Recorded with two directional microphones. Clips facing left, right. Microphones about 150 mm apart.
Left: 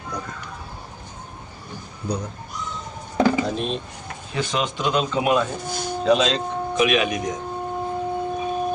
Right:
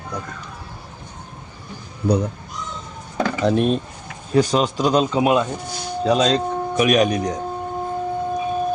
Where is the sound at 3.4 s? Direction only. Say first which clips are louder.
Right 8 dB; 55° right (ahead or behind).